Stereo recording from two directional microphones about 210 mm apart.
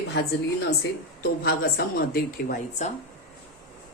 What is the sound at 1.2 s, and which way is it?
A woman's voice, 50° left (ahead or behind).